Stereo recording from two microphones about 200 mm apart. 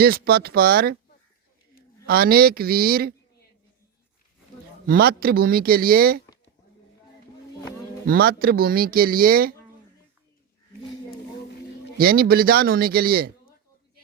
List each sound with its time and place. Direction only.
0.0 s speech: 50° right (ahead or behind)
2.0 s speech: 50° right (ahead or behind)
4.9 s speech: 50° right (ahead or behind)
8.0 s speech: 50° right (ahead or behind)
11.9 s speech: 50° right (ahead or behind)